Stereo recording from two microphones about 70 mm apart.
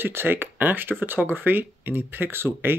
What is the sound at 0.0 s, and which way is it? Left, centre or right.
Speech, right.